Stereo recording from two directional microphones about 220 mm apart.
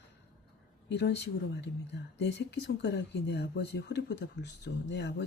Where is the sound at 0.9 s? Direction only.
50° left (ahead or behind).